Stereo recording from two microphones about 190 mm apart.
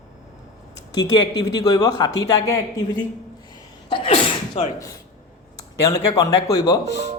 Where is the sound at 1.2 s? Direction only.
20° left (ahead or behind).